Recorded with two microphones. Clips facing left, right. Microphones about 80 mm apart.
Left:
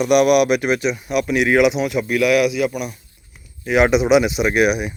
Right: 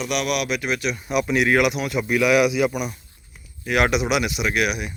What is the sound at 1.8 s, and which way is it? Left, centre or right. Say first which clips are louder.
Speech: left 3 dB; centre.